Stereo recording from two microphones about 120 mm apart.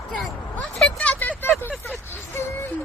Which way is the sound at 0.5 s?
10° left (ahead or behind).